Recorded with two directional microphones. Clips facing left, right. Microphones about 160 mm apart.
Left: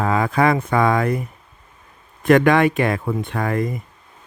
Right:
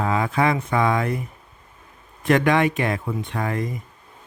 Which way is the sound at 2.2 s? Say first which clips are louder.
Left 4 dB; 50° left (ahead or behind).